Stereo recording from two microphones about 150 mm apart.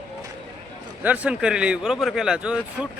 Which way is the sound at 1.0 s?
10° right (ahead or behind).